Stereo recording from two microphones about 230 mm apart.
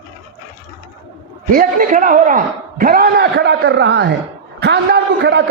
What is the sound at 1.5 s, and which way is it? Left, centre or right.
A man's voice, right.